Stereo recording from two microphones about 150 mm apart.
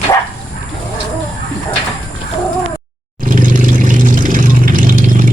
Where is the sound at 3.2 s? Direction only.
65° right (ahead or behind).